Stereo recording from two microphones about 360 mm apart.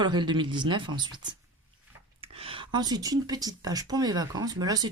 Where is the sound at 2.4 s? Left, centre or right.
Centre.